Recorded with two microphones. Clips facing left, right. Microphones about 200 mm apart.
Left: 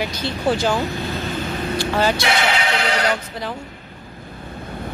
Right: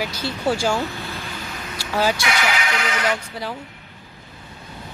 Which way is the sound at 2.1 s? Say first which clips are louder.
Left 3 dB; 30° left (ahead or behind).